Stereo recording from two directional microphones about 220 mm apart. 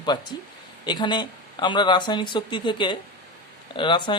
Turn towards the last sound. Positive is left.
turn(degrees=20)  # may be behind; listen again after turning